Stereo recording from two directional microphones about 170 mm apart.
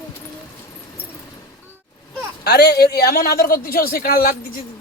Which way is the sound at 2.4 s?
70° left (ahead or behind).